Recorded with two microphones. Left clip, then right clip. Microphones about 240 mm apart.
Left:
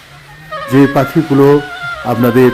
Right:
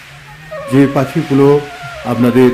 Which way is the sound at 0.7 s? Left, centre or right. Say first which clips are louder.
Left 2 dB; centre.